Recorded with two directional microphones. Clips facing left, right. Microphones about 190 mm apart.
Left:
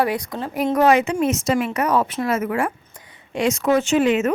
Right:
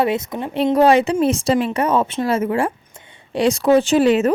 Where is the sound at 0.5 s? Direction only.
30° right (ahead or behind).